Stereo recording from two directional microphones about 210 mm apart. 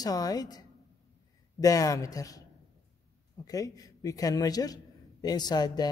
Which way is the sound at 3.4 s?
15° left (ahead or behind).